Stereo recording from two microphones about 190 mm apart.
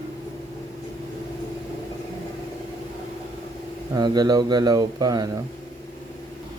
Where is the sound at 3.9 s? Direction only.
20° right (ahead or behind).